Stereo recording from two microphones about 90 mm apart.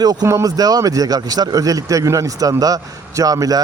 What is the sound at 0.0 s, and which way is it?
A man's voice, 45° right (ahead or behind).